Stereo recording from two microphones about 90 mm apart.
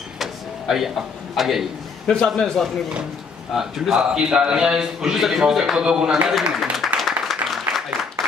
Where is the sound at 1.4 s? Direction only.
Centre (ahead or behind).